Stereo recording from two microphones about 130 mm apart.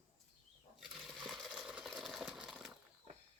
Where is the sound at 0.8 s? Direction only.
Centre (ahead or behind).